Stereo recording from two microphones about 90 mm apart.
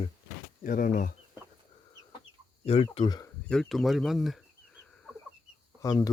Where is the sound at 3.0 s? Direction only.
90° left.